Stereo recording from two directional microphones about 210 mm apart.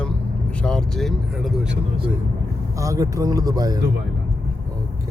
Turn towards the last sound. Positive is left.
turn(degrees=-15)  # may be behind; listen again after turning